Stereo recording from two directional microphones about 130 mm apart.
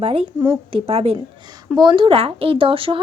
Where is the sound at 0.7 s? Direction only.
50° right (ahead or behind).